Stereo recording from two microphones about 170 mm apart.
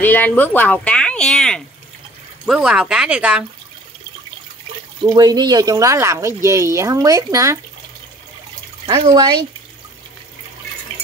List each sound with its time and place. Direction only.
0.0 s speech: 10° left (ahead or behind); by 3.4 s 5° right (ahead or behind)
5.0 s speech: 25° right (ahead or behind)
8.8 s speech: 20° right (ahead or behind)